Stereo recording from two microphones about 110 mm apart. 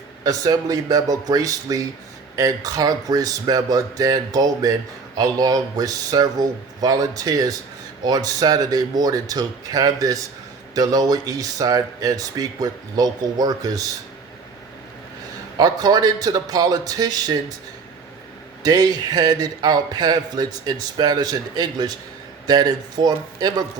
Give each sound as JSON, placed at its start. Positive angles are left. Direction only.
{"t": 0.3, "sound": "a man's voice", "side_deg": -35}
{"t": 15.5, "sound": "a man's voice", "side_deg": -35}
{"t": 18.6, "sound": "a man's voice", "side_deg": -35}